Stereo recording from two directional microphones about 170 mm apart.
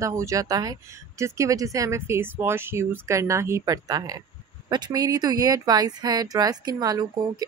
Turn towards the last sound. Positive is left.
turn(degrees=-20)  # may be behind; listen again after turning